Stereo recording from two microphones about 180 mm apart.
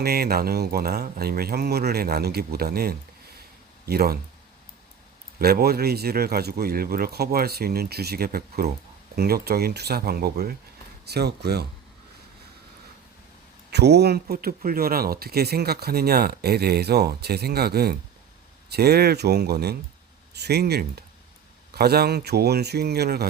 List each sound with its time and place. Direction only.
0.0 s speech: 60° right (ahead or behind)
5.4 s speech: 60° right (ahead or behind)
13.7 s speech: 65° right (ahead or behind)